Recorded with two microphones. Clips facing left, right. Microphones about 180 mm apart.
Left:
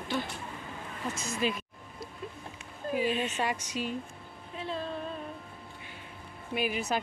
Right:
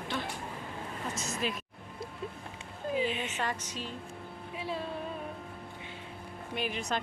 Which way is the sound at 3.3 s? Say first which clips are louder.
Left 3 dB; 10° left (ahead or behind).